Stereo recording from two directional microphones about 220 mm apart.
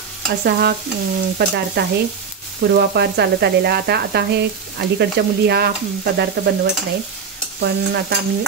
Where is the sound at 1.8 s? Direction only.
50° right (ahead or behind).